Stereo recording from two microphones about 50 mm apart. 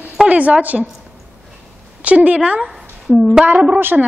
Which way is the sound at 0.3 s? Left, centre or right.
Right.